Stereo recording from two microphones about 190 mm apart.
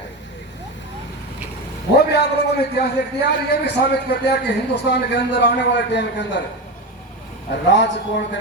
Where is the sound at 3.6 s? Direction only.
60° left (ahead or behind).